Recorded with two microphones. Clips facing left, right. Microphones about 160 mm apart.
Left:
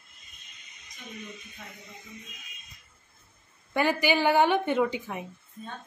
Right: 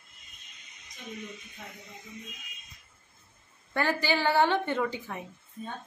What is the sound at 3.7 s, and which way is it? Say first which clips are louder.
A woman's voice: left 3 dB; 15° left (ahead or behind).